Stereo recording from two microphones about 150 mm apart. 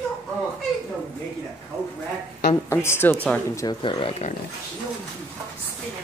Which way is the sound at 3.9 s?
45° left (ahead or behind).